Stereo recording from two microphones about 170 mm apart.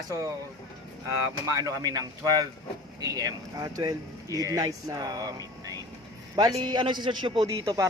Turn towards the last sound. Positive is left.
turn(degrees=-20)  # may be behind; listen again after turning